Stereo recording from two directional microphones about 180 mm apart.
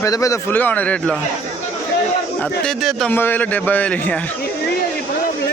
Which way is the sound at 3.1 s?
10° left (ahead or behind).